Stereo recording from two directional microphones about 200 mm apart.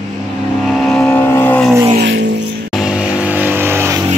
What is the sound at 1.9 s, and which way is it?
Vehicle, 65° right (ahead or behind).